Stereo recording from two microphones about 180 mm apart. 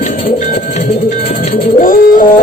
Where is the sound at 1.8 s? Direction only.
50° left (ahead or behind).